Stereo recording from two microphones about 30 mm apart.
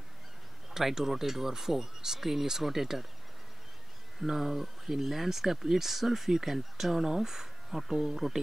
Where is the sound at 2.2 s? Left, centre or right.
Centre.